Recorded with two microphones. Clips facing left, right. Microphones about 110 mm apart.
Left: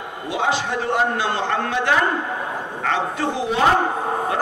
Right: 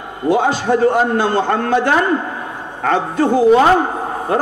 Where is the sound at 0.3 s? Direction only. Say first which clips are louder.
Right 8 dB; 45° right (ahead or behind).